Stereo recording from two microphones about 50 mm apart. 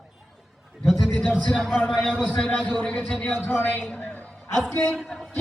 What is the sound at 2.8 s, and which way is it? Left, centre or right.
Speech, left.